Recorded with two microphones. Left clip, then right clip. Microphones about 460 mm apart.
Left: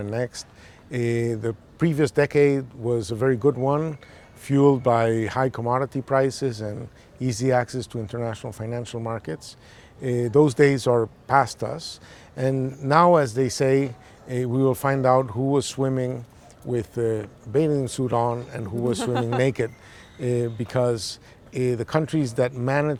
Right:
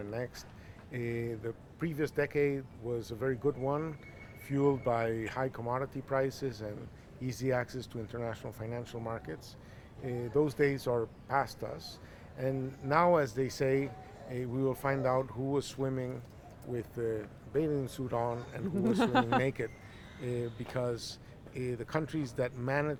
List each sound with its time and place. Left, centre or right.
0.0 s speech: left
10.0 s speech: left
18.9 s speech: right
19.4 s speech: left